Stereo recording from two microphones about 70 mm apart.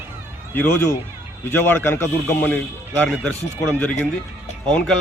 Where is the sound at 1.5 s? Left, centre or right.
Left.